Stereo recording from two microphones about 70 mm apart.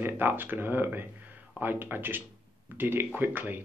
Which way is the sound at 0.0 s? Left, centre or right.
Right.